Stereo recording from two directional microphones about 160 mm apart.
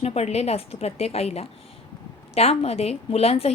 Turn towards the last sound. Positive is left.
turn(degrees=40)  # may be behind; listen again after turning